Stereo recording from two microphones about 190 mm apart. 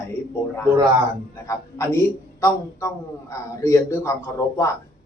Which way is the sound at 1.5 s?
15° left (ahead or behind).